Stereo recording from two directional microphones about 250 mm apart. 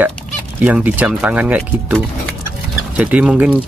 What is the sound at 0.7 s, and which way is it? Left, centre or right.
Speech, centre.